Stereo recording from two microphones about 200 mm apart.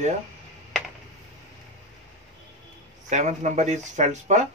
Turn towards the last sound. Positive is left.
turn(degrees=-35)  # may be behind; listen again after turning